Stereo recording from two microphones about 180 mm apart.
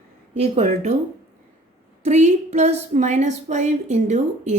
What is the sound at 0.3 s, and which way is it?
Speech, 40° right (ahead or behind).